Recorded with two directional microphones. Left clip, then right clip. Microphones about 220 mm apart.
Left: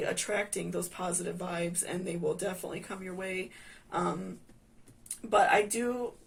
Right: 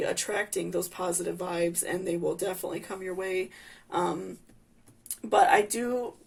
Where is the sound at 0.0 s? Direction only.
40° right (ahead or behind).